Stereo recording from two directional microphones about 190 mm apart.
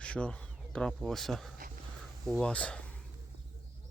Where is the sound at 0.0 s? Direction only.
5° left (ahead or behind).